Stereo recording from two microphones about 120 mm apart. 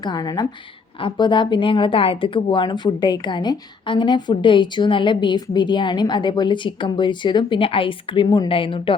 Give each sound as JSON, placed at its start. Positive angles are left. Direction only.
{"t": 0.0, "sound": "a woman's voice", "side_deg": 35}